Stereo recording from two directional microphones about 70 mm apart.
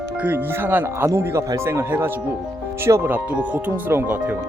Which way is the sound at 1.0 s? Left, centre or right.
Right.